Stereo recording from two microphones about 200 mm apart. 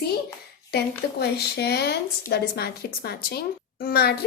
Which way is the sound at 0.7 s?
55° left (ahead or behind).